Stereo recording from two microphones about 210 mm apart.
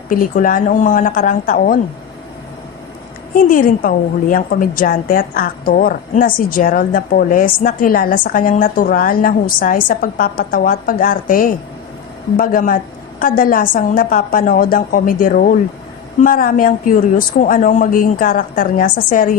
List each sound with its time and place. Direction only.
0.1 s a woman's voice: 40° left (ahead or behind)
3.3 s a woman's voice: 40° left (ahead or behind)